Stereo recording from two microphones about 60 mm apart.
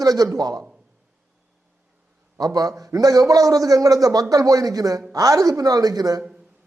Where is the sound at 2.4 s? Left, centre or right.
Right.